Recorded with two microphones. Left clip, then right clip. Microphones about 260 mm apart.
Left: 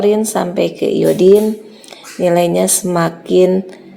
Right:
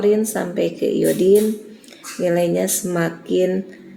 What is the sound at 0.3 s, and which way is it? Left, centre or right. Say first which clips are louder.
Speech: left 6 dB; left.